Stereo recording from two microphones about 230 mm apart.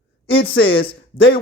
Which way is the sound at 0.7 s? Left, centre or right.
Left.